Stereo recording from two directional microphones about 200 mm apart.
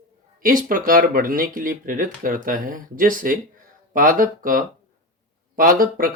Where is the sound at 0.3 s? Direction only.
45° right (ahead or behind).